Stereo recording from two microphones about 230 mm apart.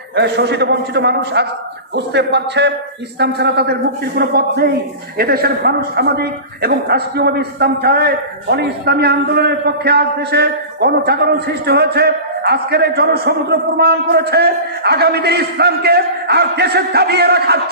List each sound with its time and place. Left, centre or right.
0.2 s a man's voice: right